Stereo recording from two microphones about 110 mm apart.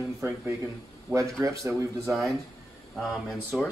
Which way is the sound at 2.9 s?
Centre (ahead or behind).